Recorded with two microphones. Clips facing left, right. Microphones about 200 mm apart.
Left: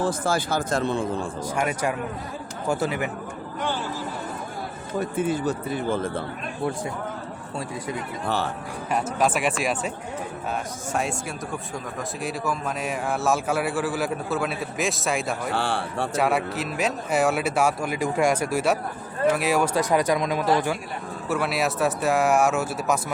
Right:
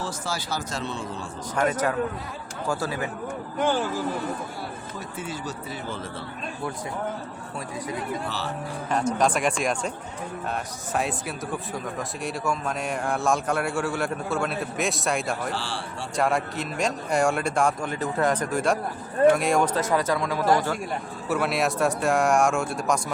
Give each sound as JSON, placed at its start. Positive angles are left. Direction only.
{"t": 0.0, "sound": "speech", "side_deg": 55}
{"t": 1.5, "sound": "speech", "side_deg": 10}
{"t": 4.9, "sound": "speech", "side_deg": 55}
{"t": 8.9, "sound": "a man's voice", "side_deg": 5}
{"t": 12.2, "sound": "a man's voice", "side_deg": 0}
{"t": 15.5, "sound": "speech", "side_deg": 55}
{"t": 16.1, "sound": "a man's voice", "side_deg": 5}
{"t": 21.2, "sound": "a man's voice", "side_deg": 0}